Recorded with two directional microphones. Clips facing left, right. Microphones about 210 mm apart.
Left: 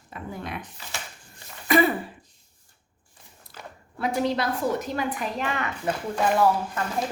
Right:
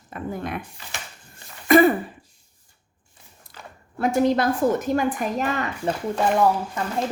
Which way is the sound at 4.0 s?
50° right (ahead or behind).